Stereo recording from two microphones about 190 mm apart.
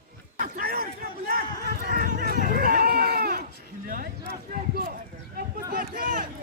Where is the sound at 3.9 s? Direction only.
50° right (ahead or behind).